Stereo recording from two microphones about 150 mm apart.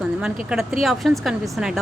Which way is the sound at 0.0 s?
5° right (ahead or behind).